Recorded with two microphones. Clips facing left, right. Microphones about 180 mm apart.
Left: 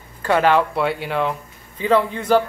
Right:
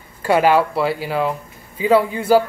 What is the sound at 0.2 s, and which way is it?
A man's voice, 10° right (ahead or behind).